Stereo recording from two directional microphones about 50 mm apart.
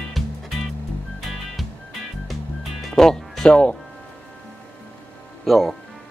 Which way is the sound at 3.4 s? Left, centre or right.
Left.